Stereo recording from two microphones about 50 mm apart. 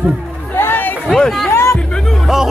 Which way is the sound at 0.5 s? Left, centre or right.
Left.